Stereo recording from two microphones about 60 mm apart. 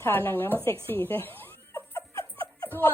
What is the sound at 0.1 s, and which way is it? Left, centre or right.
A woman's voice, left.